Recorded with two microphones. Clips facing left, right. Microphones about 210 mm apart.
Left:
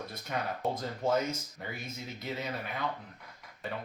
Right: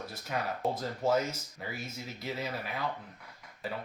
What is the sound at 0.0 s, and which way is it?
Speech, 5° right (ahead or behind).